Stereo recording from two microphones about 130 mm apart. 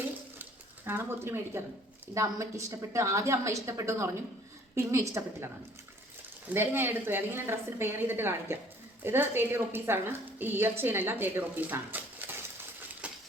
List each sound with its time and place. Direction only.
0.9 s a woman's voice: 15° right (ahead or behind)
6.5 s a woman's voice: 15° right (ahead or behind)
13.0 s a sound: 10° right (ahead or behind)